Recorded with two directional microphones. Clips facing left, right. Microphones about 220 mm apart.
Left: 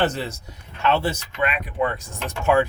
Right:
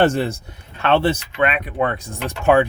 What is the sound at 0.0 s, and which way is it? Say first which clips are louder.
Speech: right 6 dB; 55° right (ahead or behind).